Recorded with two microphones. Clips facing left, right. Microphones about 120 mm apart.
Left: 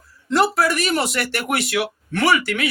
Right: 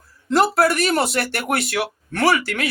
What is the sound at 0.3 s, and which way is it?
Speech, 50° right (ahead or behind).